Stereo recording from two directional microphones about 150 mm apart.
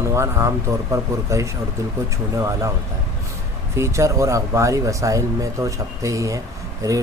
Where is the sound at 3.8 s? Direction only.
20° right (ahead or behind).